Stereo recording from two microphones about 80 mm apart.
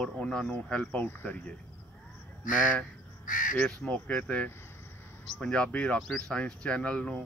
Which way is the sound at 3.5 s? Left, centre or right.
Centre.